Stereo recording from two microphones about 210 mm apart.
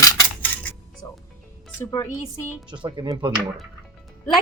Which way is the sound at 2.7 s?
20° right (ahead or behind).